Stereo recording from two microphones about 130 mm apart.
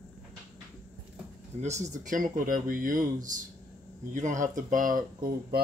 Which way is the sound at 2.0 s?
85° right.